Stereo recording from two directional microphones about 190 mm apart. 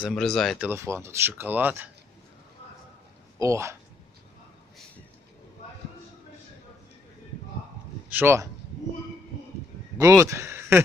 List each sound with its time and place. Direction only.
0.1 s speech: 5° left (ahead or behind)
0.7 s speech: 15° right (ahead or behind)
3.3 s speech: 15° right (ahead or behind)
8.1 s speech: 10° right (ahead or behind)
9.9 s speech: 15° right (ahead or behind)